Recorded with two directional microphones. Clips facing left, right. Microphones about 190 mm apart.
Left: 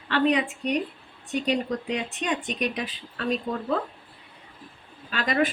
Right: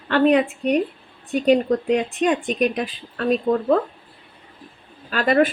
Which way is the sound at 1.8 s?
50° right (ahead or behind).